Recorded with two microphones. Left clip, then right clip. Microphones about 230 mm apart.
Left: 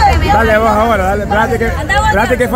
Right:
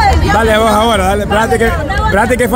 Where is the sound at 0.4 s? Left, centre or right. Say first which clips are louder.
Right 1 dB; centre.